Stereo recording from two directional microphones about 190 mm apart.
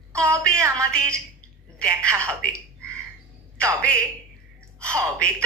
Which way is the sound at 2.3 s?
5° left (ahead or behind).